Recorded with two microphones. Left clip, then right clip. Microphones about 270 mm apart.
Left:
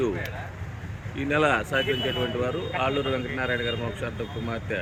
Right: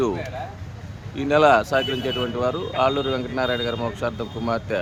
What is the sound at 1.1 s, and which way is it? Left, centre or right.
Speech, centre.